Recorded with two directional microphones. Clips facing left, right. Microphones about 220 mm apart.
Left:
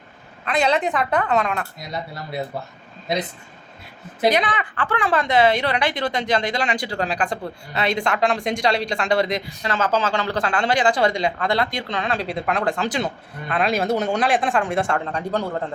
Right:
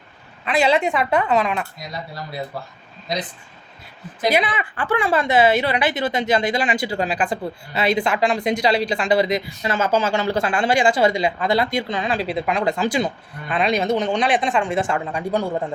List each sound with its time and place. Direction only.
0.4 s a woman's voice: 5° right (ahead or behind)
1.9 s speech: 25° left (ahead or behind)
4.3 s a woman's voice: 10° right (ahead or behind)